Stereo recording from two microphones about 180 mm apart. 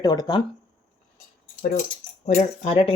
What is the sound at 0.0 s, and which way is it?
Speech, 20° left (ahead or behind).